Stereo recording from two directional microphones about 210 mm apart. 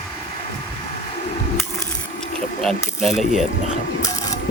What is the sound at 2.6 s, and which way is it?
Speech, centre (ahead or behind).